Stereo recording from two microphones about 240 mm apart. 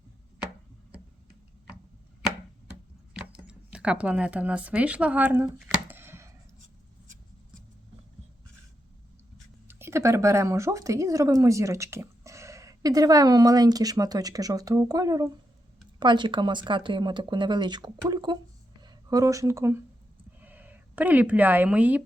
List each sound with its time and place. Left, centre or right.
3.1 s speech: centre
5.9 s a sound: centre
9.6 s speech: centre